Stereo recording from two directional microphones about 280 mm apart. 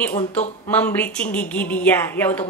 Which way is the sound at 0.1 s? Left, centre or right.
Left.